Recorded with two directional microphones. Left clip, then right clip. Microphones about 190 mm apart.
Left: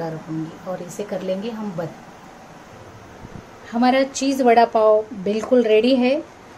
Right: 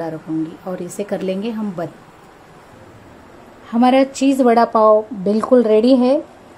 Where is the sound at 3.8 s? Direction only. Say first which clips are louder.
Right 4 dB; 30° right (ahead or behind).